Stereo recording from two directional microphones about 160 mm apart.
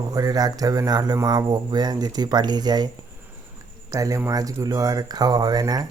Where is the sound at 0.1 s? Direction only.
25° right (ahead or behind).